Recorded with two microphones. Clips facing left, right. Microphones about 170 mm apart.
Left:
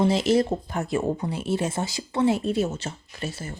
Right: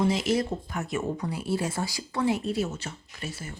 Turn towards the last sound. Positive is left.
turn(degrees=30)  # may be behind; listen again after turning